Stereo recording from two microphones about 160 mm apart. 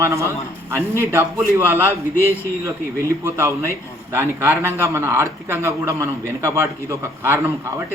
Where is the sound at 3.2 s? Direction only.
15° right (ahead or behind).